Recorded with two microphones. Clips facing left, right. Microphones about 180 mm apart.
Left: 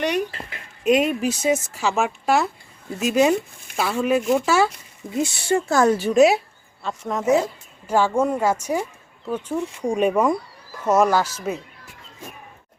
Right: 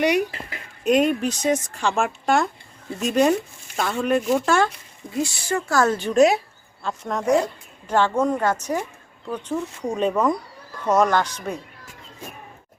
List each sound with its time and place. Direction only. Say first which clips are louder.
0.0 s speech: right 3 dB; 10° right (ahead or behind)
0.9 s speech: even; 5° left (ahead or behind)
5.1 s a woman's voice: left 3 dB; 25° left (ahead or behind); by 11.6 s 5° left (ahead or behind)